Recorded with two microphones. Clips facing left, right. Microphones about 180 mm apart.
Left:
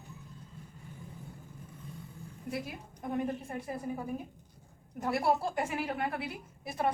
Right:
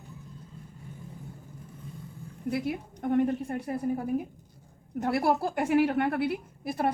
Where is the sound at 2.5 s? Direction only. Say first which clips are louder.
Right 8 dB; 65° right (ahead or behind).